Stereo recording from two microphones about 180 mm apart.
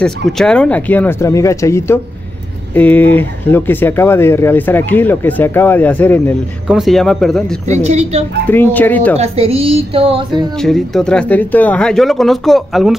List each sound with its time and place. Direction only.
0.0 s speech: 5° left (ahead or behind)
6.7 s speech: centre (ahead or behind)
7.6 s a woman's voice: 40° right (ahead or behind)
8.5 s speech: 10° left (ahead or behind)
9.2 s a woman's voice: 35° right (ahead or behind)
10.6 s speech: centre (ahead or behind)